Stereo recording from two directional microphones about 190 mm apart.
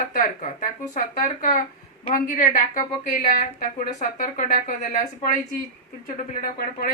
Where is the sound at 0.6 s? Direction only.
45° left (ahead or behind).